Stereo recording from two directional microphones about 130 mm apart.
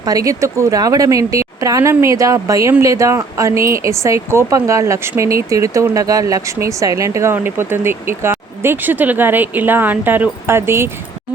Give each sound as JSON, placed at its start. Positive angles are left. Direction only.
{"t": 0.0, "sound": "speech", "side_deg": -30}